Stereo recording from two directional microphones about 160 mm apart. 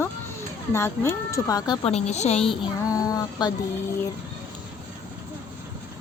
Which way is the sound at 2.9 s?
20° left (ahead or behind).